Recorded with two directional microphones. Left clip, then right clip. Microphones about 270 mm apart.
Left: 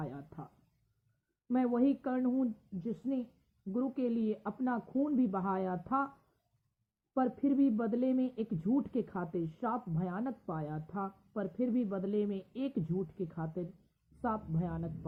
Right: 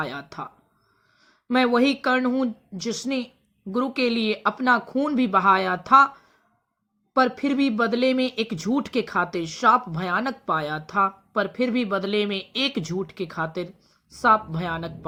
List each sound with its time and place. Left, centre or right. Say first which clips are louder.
0.0 s speech: right 15 dB; right
7.1 s speech: right 12 dB; right